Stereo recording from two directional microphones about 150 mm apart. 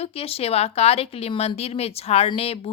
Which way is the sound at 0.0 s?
40° left (ahead or behind).